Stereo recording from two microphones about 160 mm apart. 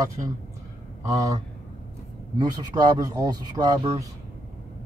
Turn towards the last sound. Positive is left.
turn(degrees=-25)  # may be behind; listen again after turning